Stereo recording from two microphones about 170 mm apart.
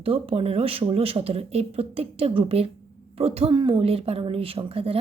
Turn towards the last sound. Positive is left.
turn(degrees=-35)  # may be behind; listen again after turning